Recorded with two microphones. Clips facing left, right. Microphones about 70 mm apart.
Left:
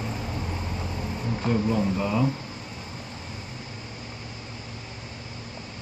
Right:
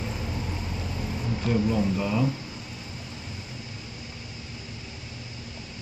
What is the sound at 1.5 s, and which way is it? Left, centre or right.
Speech, left.